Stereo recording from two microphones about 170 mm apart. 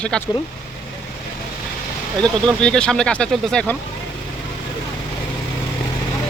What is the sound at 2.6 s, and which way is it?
Speech, 5° left (ahead or behind).